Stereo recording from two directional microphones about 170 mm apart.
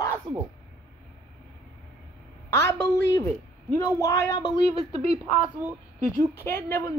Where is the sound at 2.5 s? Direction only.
15° left (ahead or behind).